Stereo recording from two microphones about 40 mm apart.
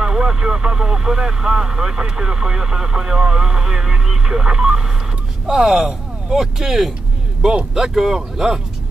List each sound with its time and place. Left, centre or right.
0.0 s speech: centre